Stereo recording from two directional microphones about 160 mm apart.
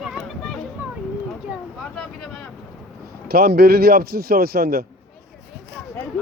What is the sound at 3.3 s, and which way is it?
Speech, 75° right (ahead or behind).